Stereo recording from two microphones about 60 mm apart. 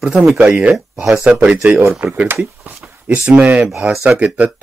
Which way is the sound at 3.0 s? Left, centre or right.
Centre.